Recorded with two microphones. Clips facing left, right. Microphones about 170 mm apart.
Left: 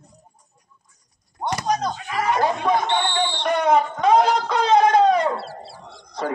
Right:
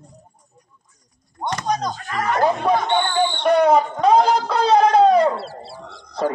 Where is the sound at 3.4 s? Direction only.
35° right (ahead or behind).